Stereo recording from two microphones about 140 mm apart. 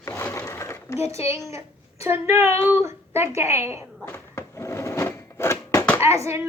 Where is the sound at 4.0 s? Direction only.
20° left (ahead or behind).